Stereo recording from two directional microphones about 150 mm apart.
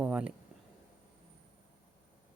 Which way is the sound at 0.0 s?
10° right (ahead or behind).